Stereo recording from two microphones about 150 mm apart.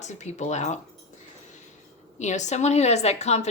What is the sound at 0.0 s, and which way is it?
Speech, 50° left (ahead or behind).